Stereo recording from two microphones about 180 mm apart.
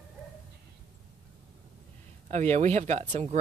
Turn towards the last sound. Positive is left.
turn(degrees=-40)  # may be behind; listen again after turning